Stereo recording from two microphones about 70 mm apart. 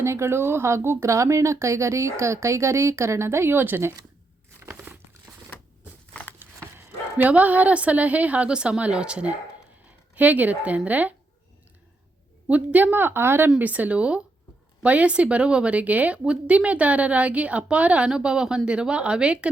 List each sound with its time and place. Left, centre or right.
0.0 s speech: right
4.9 s crumpling: centre
6.4 s dog: right
7.3 s a woman's voice: right
12.5 s a woman's voice: right
13.6 s a woman's voice: right